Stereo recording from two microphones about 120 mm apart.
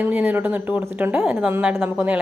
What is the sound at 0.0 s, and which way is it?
A woman's voice, 15° right (ahead or behind).